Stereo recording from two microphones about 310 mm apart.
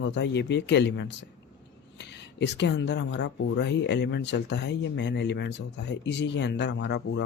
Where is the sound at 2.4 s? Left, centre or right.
Left.